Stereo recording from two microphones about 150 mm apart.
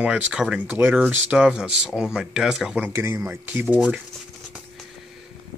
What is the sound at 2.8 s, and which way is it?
Speech, 20° right (ahead or behind).